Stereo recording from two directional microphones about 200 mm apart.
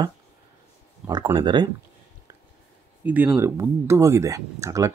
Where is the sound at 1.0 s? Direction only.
20° right (ahead or behind).